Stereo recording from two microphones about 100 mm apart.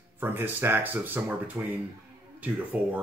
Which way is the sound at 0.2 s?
20° right (ahead or behind).